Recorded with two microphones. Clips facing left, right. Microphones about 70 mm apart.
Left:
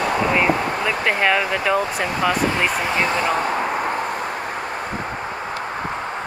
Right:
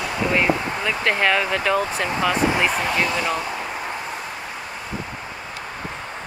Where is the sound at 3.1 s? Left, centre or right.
Left.